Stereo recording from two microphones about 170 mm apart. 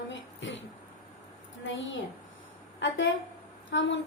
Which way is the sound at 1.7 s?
90° left.